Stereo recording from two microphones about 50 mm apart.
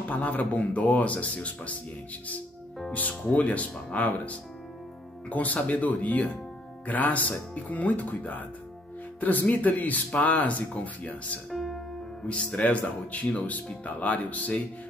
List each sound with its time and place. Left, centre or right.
0.1 s speech: left
2.9 s speech: left
5.3 s speech: left
11.5 s music: centre
12.3 s speech: left